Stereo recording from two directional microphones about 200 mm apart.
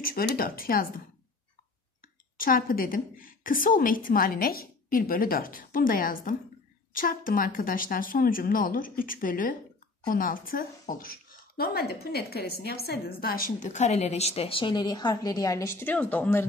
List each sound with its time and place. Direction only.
0.0 s a woman's voice: 45° left (ahead or behind)
2.3 s a woman's voice: 45° left (ahead or behind); by 16.4 s 10° left (ahead or behind)